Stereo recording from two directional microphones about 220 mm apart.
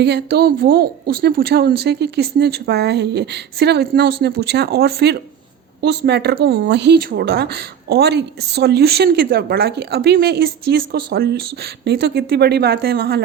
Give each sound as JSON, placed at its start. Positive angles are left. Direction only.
{"t": 0.0, "sound": "speech", "side_deg": -45}